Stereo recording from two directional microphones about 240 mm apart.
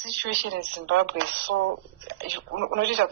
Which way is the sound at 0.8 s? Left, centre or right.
Right.